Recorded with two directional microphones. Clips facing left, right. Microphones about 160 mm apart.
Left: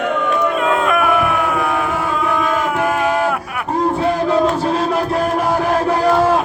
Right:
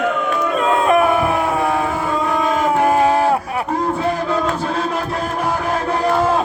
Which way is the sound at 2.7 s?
30° right (ahead or behind).